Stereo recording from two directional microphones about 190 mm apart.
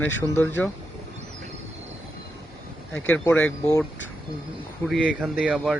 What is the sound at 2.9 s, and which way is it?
Speech, 10° left (ahead or behind).